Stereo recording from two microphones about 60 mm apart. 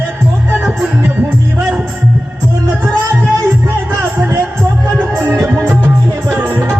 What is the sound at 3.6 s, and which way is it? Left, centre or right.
Music, right.